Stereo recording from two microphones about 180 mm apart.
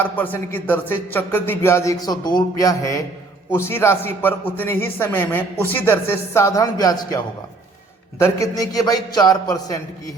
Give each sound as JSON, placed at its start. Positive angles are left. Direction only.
{"t": 0.0, "sound": "a man's voice", "side_deg": 10}
{"t": 8.2, "sound": "a man's voice", "side_deg": 20}